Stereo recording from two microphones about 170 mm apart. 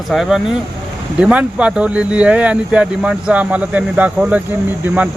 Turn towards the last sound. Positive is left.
turn(degrees=-10)  # may be behind; listen again after turning